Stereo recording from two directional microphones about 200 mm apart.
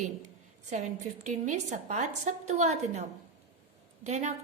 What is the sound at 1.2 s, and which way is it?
A woman's voice, 35° right (ahead or behind).